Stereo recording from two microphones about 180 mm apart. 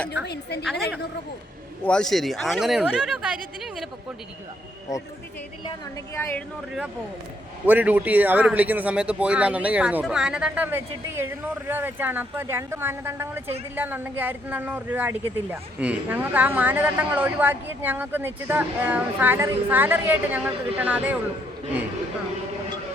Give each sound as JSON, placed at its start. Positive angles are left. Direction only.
{"t": 0.1, "sound": "a woman's voice", "side_deg": 65}
{"t": 0.6, "sound": "speech", "side_deg": 0}
{"t": 7.7, "sound": "speech", "side_deg": -10}